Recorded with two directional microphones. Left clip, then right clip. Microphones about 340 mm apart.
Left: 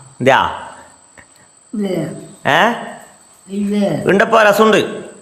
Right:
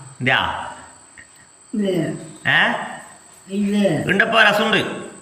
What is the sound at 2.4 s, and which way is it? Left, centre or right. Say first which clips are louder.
A man's voice: left 4 dB; centre.